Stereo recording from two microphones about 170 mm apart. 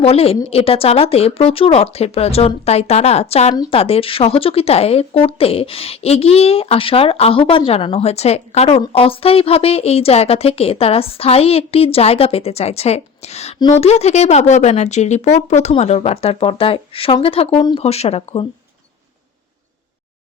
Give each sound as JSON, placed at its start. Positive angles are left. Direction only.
{"t": 0.0, "sound": "speech", "side_deg": 35}
{"t": 3.5, "sound": "speech", "side_deg": 25}
{"t": 3.8, "sound": "speech", "side_deg": 35}